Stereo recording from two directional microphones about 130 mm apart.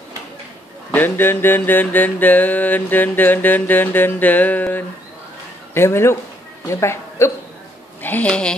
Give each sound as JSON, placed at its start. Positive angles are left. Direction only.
{"t": 0.9, "sound": "mantra", "side_deg": 15}
{"t": 5.8, "sound": "a woman's voice", "side_deg": 20}
{"t": 8.0, "sound": "mantra", "side_deg": 10}